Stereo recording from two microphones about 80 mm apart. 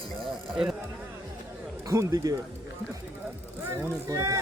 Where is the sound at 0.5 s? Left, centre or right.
Centre.